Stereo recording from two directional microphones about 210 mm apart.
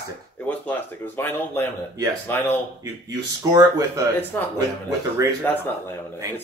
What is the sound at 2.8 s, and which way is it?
Speech, 15° right (ahead or behind).